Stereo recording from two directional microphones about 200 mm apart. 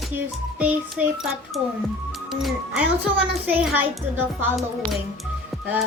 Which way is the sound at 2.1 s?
Centre (ahead or behind).